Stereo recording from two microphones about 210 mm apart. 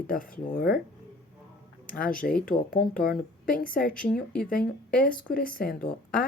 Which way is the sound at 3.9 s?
5° left (ahead or behind).